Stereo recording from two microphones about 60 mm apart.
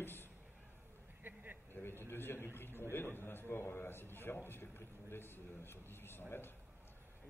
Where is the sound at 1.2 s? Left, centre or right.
Right.